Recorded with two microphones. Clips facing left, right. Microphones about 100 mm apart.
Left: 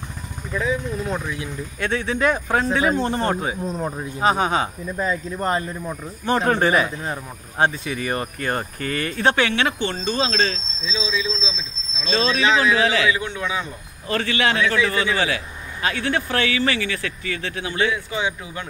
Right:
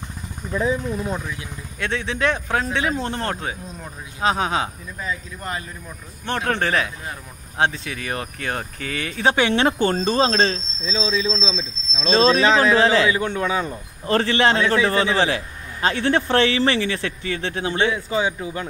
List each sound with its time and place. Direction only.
0.5 s speech: 30° right (ahead or behind)
1.8 s speech: centre (ahead or behind)
3.6 s speech: 35° left (ahead or behind)
4.2 s speech: centre (ahead or behind)
4.9 s speech: 40° left (ahead or behind)
6.2 s speech: 5° left (ahead or behind)
9.5 s speech: 35° right (ahead or behind)